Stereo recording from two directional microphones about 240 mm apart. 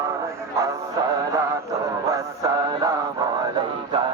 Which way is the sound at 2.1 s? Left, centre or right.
Centre.